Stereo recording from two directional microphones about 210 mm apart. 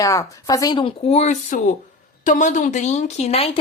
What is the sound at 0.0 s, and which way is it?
A woman's voice, 15° left (ahead or behind).